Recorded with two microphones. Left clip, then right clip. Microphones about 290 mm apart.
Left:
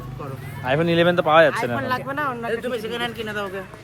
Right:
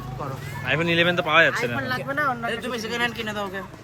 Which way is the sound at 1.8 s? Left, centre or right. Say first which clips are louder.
Left 2 dB; left.